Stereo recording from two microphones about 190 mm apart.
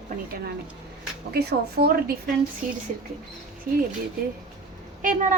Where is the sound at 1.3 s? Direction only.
55° right (ahead or behind).